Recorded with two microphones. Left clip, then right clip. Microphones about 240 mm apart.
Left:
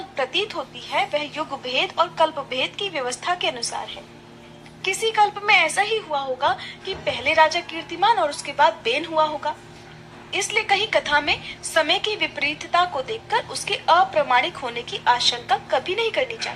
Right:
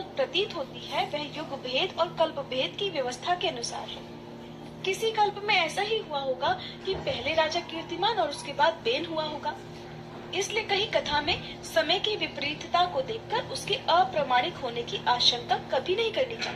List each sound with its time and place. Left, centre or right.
0.2 s a woman's voice: left
4.8 s a woman's voice: left